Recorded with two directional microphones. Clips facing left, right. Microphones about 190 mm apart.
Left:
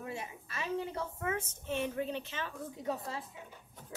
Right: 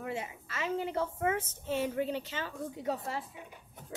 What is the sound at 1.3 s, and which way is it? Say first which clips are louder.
Speech: right 3 dB; 30° right (ahead or behind).